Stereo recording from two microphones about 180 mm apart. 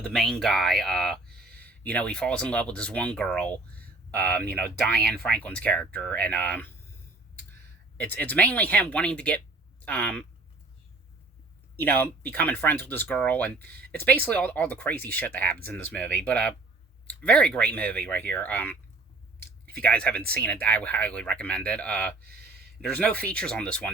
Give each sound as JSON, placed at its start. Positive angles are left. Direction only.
{"t": 0.0, "sound": "speech", "side_deg": 0}
{"t": 1.4, "sound": "a sound", "side_deg": -60}
{"t": 1.6, "sound": "speech", "side_deg": 5}
{"t": 7.9, "sound": "speech", "side_deg": 10}
{"t": 11.8, "sound": "speech", "side_deg": 10}
{"t": 22.2, "sound": "a sound", "side_deg": -60}
{"t": 22.8, "sound": "speech", "side_deg": 10}